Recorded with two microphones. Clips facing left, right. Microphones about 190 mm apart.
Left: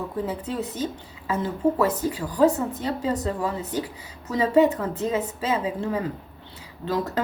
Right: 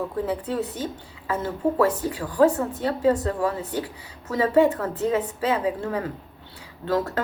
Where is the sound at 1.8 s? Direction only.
20° left (ahead or behind).